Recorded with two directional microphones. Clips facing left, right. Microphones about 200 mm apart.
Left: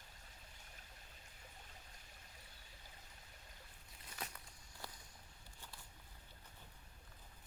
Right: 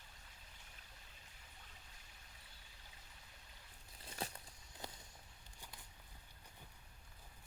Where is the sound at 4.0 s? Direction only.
30° right (ahead or behind).